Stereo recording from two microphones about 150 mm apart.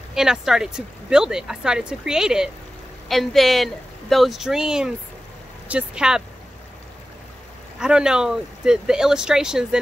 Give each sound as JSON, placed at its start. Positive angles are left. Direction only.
{"t": 0.1, "sound": "speech", "side_deg": -5}
{"t": 7.8, "sound": "speech", "side_deg": -5}